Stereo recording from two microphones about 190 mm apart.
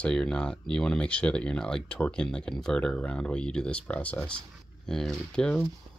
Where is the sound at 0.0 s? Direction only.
5° left (ahead or behind).